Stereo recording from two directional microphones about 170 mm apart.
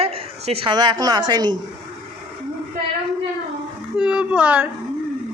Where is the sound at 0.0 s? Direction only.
35° right (ahead or behind).